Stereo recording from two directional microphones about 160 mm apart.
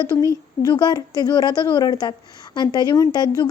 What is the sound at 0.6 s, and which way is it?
A woman's voice, 25° left (ahead or behind).